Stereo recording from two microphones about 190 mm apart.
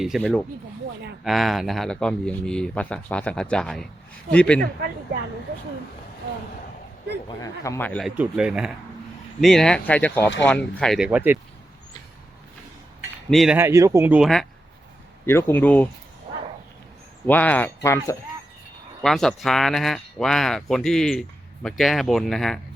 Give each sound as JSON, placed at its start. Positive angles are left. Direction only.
{"t": 0.0, "sound": "speech", "side_deg": 0}
{"t": 7.3, "sound": "speech", "side_deg": 15}
{"t": 8.0, "sound": "speech", "side_deg": -5}
{"t": 13.3, "sound": "speech", "side_deg": 0}
{"t": 13.6, "sound": "speech", "side_deg": -15}
{"t": 15.3, "sound": "speech", "side_deg": 10}
{"t": 17.2, "sound": "speech", "side_deg": 10}
{"t": 19.0, "sound": "speech", "side_deg": 0}